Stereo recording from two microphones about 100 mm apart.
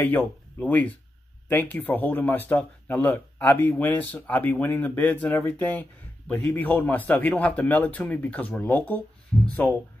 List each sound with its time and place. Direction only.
0.0 s speech: 15° left (ahead or behind)